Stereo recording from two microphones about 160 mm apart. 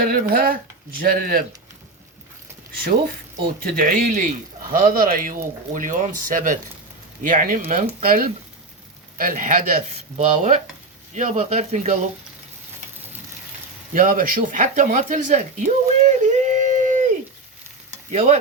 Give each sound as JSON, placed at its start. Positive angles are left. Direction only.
{"t": 0.0, "sound": "a man's voice", "side_deg": -65}
{"t": 3.4, "sound": "a man's voice", "side_deg": -65}
{"t": 4.7, "sound": "a man's voice", "side_deg": -65}
{"t": 9.9, "sound": "speech", "side_deg": -45}
{"t": 13.9, "sound": "speech", "side_deg": -60}
{"t": 18.1, "sound": "speech", "side_deg": -45}